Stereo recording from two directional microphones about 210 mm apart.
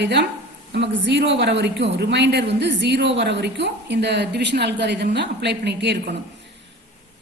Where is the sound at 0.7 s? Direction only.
55° right (ahead or behind).